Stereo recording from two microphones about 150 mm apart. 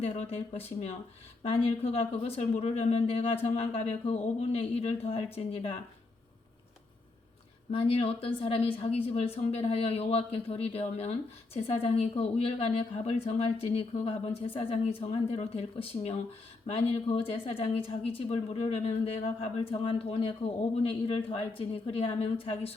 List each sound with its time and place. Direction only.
0.0 s speech: 40° left (ahead or behind)
7.7 s a woman's voice: 40° left (ahead or behind)